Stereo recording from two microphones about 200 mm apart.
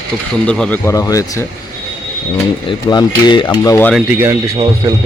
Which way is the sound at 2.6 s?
20° left (ahead or behind).